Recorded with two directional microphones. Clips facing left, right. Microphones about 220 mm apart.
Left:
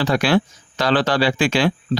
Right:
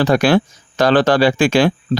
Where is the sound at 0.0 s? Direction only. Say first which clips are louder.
Right 4 dB; 45° right (ahead or behind).